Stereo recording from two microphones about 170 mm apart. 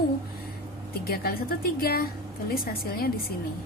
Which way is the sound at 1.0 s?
65° left (ahead or behind).